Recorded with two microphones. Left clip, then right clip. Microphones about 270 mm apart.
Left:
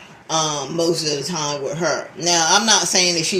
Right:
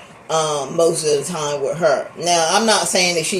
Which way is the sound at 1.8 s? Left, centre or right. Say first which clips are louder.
Right 6 dB; left.